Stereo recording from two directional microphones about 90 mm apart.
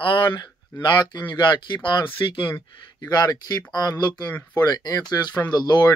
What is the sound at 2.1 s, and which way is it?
Speech, 70° left (ahead or behind).